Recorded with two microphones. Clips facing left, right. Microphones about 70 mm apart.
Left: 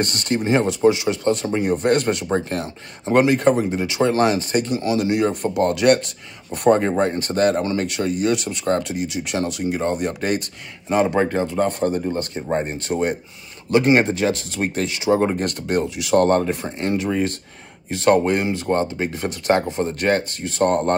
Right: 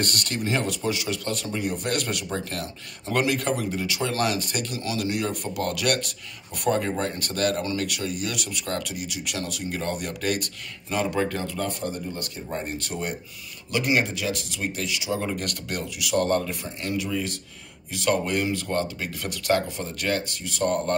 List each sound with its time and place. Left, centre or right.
0.0 s speech: left